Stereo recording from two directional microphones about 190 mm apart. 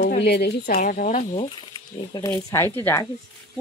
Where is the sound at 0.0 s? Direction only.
60° left (ahead or behind).